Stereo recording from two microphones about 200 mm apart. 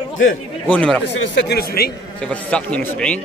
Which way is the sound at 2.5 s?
5° left (ahead or behind).